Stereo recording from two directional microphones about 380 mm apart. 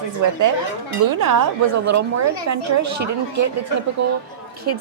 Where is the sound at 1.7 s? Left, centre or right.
Right.